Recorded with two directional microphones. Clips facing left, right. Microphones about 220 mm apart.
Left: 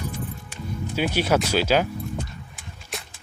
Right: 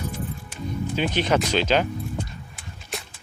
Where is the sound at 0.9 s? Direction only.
10° left (ahead or behind).